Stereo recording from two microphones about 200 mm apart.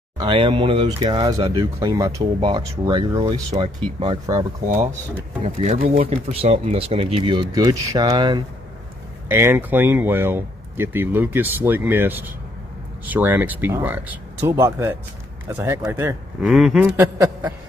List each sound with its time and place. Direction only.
0.2 s speech: 25° right (ahead or behind)
5.4 s speech: 35° right (ahead or behind); by 8.4 s 20° right (ahead or behind)
9.3 s speech: 10° right (ahead or behind)